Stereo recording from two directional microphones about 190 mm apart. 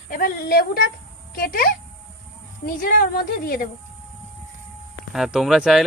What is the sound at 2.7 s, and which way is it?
Speech, 50° left (ahead or behind).